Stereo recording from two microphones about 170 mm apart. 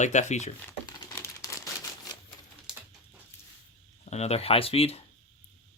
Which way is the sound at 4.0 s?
40° left (ahead or behind).